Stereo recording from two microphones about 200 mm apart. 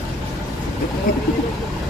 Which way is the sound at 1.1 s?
45° left (ahead or behind).